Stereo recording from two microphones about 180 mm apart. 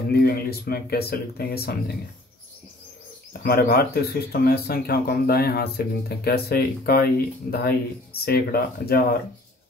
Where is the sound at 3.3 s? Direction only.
55° left (ahead or behind).